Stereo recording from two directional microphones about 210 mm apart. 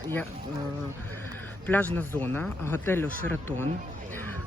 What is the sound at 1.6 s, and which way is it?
Speech, 10° left (ahead or behind).